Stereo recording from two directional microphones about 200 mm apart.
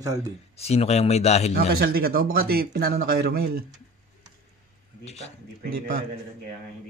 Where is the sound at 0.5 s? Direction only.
30° left (ahead or behind).